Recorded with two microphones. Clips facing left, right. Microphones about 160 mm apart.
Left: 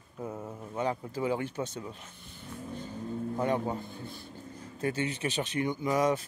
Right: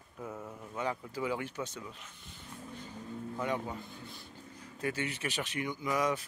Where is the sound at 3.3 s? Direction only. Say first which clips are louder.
Left 5 dB; 35° left (ahead or behind).